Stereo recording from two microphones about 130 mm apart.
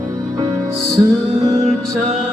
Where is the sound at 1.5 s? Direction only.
5° left (ahead or behind).